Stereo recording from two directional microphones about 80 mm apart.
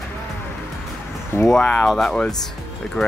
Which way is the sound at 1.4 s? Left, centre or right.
Centre.